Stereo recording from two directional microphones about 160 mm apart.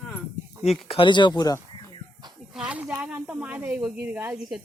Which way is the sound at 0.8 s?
35° left (ahead or behind).